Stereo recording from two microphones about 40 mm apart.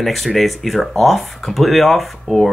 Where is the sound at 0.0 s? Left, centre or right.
Centre.